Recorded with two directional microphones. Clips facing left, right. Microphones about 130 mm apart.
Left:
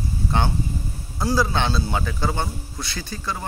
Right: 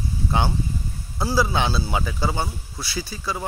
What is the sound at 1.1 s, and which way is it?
A man's voice, 5° right (ahead or behind).